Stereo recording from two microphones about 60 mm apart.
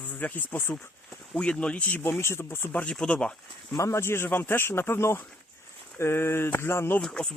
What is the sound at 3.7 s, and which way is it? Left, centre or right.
Speech, left.